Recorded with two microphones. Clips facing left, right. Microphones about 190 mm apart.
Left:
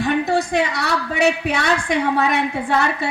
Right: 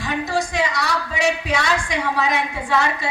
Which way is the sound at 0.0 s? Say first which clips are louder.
Left 5 dB; 60° left (ahead or behind).